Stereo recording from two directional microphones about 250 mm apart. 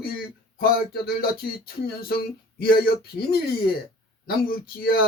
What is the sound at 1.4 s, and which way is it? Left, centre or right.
Speech, left.